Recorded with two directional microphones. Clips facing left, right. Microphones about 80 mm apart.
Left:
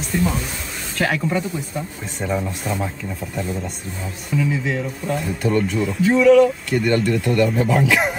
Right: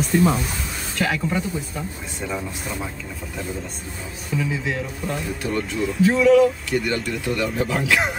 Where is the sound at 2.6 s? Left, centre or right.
Centre.